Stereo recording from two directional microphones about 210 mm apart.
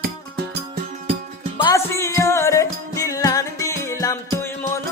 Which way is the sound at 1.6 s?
15° left (ahead or behind).